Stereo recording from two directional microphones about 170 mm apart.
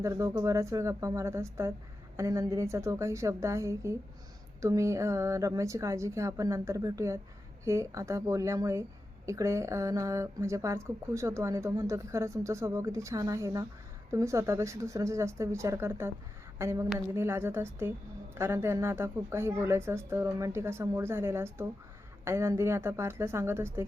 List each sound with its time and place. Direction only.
0.0 s a woman's voice: 20° right (ahead or behind)